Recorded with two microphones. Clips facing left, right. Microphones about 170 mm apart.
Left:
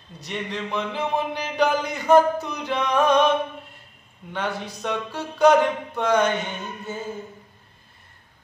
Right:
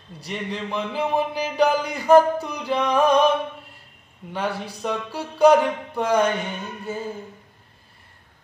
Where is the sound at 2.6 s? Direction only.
35° right (ahead or behind).